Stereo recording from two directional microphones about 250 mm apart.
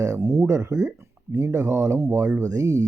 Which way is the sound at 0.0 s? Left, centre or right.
Centre.